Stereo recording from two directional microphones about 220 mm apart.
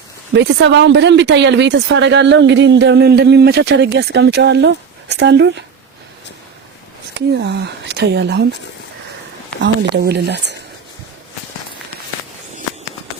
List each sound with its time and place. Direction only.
0.3 s speech: 55° right (ahead or behind)
7.1 s speech: 50° right (ahead or behind)
9.6 s speech: 50° right (ahead or behind)